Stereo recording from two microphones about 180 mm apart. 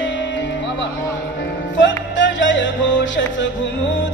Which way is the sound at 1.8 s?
90° left.